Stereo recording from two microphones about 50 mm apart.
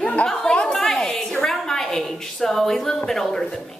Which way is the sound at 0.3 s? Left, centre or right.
Centre.